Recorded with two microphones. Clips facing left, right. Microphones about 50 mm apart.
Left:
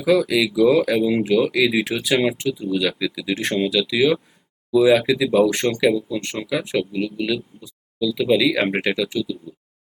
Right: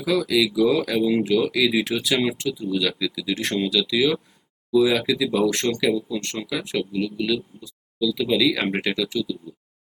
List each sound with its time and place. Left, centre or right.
0.0 s speech: centre
3.7 s speech: centre